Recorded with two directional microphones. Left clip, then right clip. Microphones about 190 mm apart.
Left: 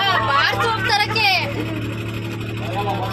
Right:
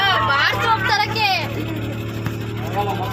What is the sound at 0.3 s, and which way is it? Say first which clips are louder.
Music: right 1 dB; 25° left (ahead or behind).